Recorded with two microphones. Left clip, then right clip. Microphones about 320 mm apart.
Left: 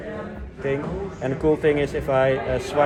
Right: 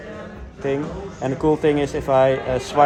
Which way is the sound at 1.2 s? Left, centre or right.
Right.